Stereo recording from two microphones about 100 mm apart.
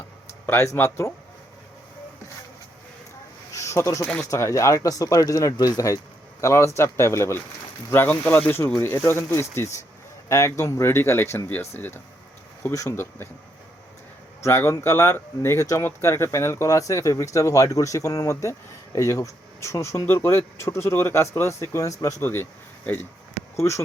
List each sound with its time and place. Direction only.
0.4 s speech: 25° left (ahead or behind)
3.5 s a sound: 30° left (ahead or behind)
4.0 s speech: 10° left (ahead or behind)
4.3 s speech: 30° left (ahead or behind)
12.7 s speech: 25° left (ahead or behind)
14.4 s speech: 25° left (ahead or behind)
22.3 s speech: 20° left (ahead or behind)